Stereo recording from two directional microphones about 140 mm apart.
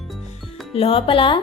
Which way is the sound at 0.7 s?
40° left (ahead or behind).